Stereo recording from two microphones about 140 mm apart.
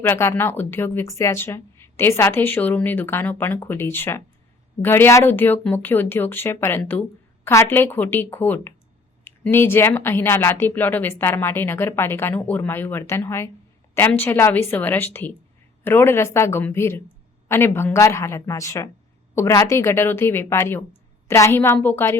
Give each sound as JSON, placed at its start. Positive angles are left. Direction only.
{"t": 0.0, "sound": "a woman's voice", "side_deg": 15}